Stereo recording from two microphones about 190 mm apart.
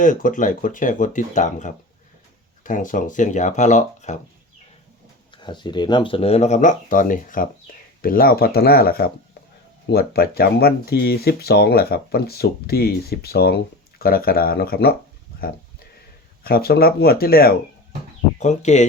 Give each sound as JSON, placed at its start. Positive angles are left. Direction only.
{"t": 0.0, "sound": "speech", "side_deg": 45}
{"t": 5.3, "sound": "speech", "side_deg": 25}
{"t": 7.7, "sound": "a sound", "side_deg": 50}
{"t": 8.0, "sound": "speech", "side_deg": 50}
{"t": 16.4, "sound": "speech", "side_deg": 55}
{"t": 18.3, "sound": "speech", "side_deg": 35}